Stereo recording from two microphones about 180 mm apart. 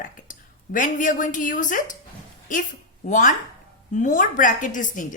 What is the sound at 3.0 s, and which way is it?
A woman's voice, 45° left (ahead or behind).